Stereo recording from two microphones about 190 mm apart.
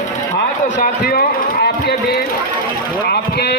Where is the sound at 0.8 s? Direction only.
50° left (ahead or behind).